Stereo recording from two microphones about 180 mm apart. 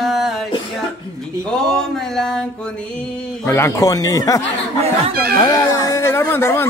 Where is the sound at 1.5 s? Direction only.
Centre (ahead or behind); by 4.4 s 20° left (ahead or behind).